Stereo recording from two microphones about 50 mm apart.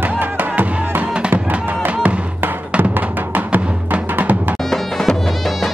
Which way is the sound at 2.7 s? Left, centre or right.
Right.